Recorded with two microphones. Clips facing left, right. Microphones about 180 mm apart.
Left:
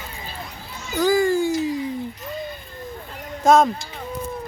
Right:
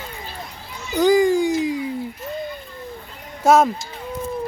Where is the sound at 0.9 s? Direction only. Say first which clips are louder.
Right 3 dB; 20° right (ahead or behind).